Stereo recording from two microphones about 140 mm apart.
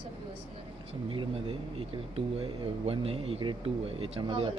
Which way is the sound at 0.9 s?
40° right (ahead or behind).